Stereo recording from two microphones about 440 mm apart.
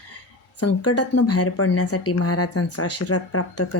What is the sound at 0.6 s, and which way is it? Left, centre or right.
Speech, left.